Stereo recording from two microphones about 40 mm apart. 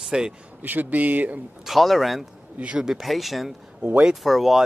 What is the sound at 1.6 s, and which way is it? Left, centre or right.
Speech, centre.